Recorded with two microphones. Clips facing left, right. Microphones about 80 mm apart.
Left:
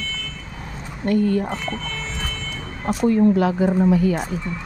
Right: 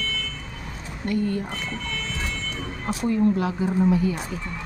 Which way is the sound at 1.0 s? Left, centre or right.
Left.